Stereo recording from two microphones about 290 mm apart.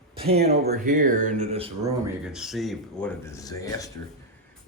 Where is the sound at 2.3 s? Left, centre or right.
Centre.